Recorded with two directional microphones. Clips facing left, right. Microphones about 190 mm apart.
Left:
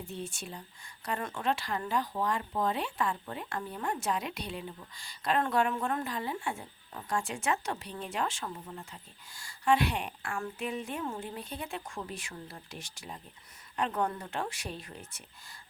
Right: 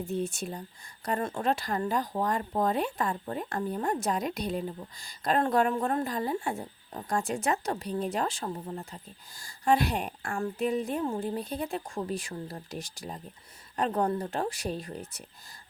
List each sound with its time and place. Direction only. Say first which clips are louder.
0.1 s speech: right 8 dB; 45° right (ahead or behind)